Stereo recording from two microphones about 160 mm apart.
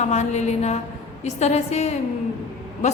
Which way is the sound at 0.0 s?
45° left (ahead or behind).